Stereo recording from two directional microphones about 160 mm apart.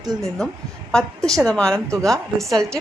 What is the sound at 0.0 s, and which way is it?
Speech, 25° right (ahead or behind).